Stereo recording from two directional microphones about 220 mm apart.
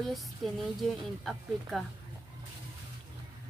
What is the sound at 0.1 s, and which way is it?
A woman's voice, centre (ahead or behind).